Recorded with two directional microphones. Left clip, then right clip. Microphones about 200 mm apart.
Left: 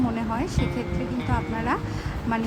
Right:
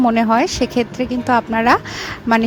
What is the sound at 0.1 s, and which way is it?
A woman's voice, 50° right (ahead or behind).